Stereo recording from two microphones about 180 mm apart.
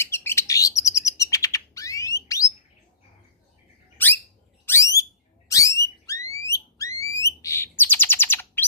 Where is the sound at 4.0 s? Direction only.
10° left (ahead or behind).